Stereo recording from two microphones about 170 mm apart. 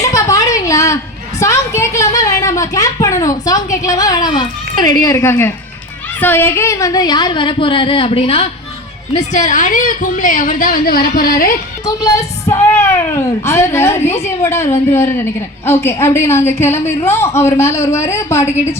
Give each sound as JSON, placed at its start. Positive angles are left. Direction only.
{"t": 0.0, "sound": "a sound", "side_deg": 20}
{"t": 1.4, "sound": "a woman's voice", "side_deg": 15}
{"t": 9.1, "sound": "a woman's voice", "side_deg": 45}
{"t": 11.9, "sound": "a man's voice", "side_deg": 20}